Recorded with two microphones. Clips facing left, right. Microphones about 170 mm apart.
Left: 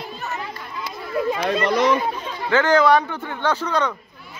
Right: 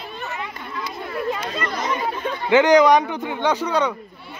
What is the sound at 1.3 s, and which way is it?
Speech, 75° left (ahead or behind).